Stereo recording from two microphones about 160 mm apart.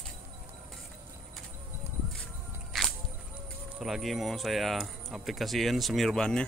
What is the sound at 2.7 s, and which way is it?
Music, centre (ahead or behind).